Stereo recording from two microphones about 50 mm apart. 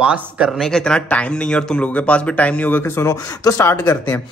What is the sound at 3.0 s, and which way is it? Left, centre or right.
Speech, left.